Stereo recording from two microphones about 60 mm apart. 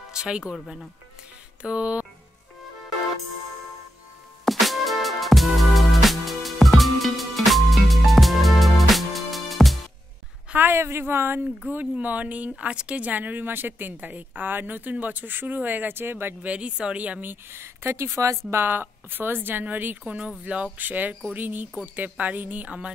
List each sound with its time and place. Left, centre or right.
0.1 s speech: centre
1.6 s music: centre
4.5 s music: centre
10.6 s speech: right
11.7 s speech: right
16.4 s speech: centre
17.2 s speech: right
18.5 s a woman's voice: right